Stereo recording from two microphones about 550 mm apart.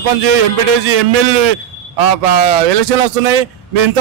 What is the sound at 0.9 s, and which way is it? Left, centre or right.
A man's voice, right.